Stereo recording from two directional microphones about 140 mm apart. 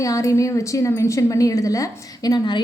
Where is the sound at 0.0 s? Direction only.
25° left (ahead or behind).